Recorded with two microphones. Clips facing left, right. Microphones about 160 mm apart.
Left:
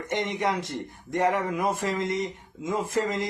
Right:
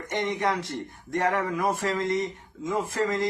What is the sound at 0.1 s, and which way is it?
Speech, 20° left (ahead or behind).